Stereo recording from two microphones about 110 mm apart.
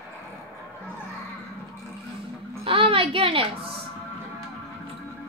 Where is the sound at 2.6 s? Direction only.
55° right (ahead or behind).